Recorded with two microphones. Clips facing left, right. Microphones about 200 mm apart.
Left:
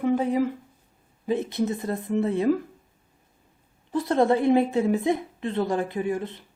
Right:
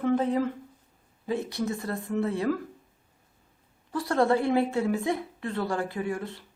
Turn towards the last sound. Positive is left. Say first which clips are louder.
# left 4 dB
turn(degrees=20)  # may be behind; listen again after turning